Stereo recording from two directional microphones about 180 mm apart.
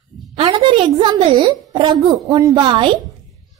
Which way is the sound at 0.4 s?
30° right (ahead or behind).